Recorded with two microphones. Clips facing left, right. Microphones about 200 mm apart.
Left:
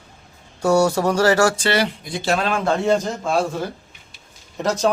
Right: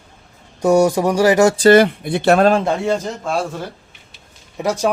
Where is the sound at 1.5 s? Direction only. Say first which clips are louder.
Right 11 dB; 35° right (ahead or behind).